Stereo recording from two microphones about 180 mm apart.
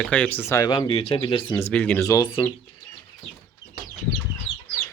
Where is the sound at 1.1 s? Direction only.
30° left (ahead or behind).